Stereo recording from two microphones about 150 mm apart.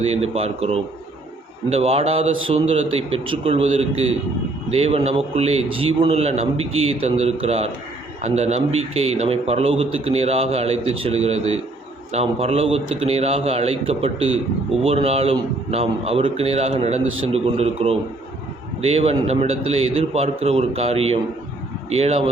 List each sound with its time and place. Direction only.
0.0 s a man's voice: 45° right (ahead or behind)